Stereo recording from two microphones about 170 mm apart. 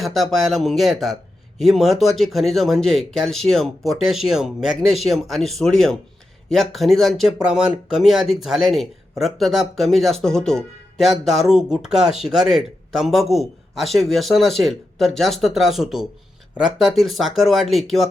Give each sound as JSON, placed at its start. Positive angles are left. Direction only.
{"t": 0.0, "sound": "speech", "side_deg": 0}